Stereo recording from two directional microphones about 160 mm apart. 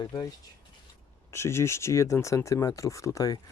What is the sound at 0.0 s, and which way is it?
Speech, 25° left (ahead or behind).